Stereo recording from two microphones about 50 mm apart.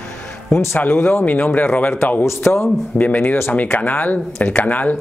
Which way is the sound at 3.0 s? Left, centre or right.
Left.